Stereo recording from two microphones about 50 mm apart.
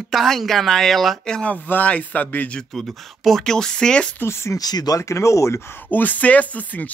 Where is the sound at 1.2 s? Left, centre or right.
Centre.